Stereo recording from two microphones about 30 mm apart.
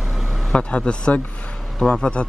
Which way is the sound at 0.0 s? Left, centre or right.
Centre.